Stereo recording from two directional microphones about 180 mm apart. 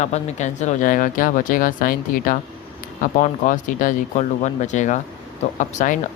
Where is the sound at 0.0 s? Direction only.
40° left (ahead or behind).